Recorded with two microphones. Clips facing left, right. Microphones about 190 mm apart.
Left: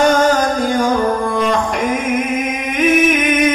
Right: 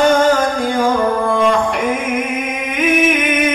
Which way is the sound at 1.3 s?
45° left (ahead or behind).